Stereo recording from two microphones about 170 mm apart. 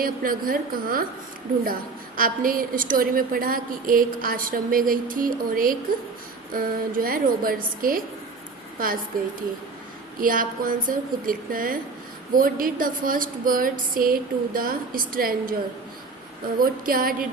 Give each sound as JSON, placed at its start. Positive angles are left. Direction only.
{"t": 0.0, "sound": "a woman's voice", "side_deg": -55}
{"t": 2.1, "sound": "a woman's voice", "side_deg": -55}
{"t": 10.2, "sound": "a woman's voice", "side_deg": -55}
{"t": 16.6, "sound": "a woman's voice", "side_deg": -55}